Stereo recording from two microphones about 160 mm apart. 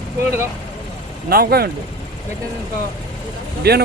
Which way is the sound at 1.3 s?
70° right (ahead or behind).